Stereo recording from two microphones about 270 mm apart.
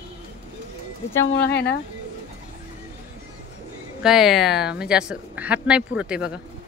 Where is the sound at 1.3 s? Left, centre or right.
Left.